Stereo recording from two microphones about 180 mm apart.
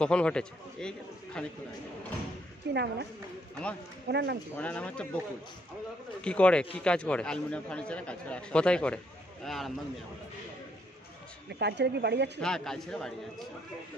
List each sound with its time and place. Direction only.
0.0 s a man's voice: 5° left (ahead or behind)
2.7 s speech: 70° right (ahead or behind)
4.1 s speech: 70° right (ahead or behind)
4.6 s speech: 5° left (ahead or behind)
6.2 s a man's voice: 5° left (ahead or behind)
11.4 s speech: 70° right (ahead or behind)
12.4 s a man's voice: 5° left (ahead or behind)